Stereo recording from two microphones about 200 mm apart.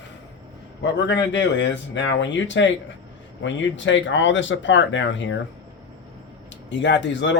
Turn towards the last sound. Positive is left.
turn(degrees=60)  # may be behind; listen again after turning